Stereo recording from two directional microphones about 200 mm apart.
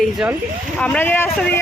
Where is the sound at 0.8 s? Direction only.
5° left (ahead or behind).